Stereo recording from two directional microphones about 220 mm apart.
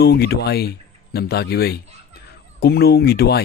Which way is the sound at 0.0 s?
45° left (ahead or behind).